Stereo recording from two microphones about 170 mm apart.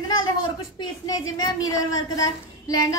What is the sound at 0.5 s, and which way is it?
Speech, 25° left (ahead or behind).